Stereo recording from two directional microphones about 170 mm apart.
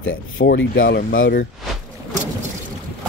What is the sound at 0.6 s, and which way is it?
Speech, 65° left (ahead or behind).